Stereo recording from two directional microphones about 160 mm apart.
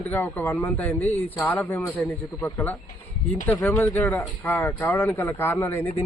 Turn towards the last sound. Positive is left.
turn(degrees=15)  # may be behind; listen again after turning